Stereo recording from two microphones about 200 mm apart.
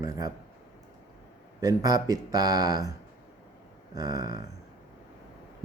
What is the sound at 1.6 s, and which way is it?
A man's voice, 15° right (ahead or behind).